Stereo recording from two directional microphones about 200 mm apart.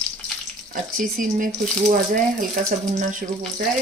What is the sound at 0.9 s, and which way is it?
Speech, 45° right (ahead or behind).